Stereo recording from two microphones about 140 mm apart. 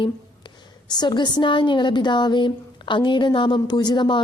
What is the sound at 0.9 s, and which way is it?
A woman's voice, 30° left (ahead or behind).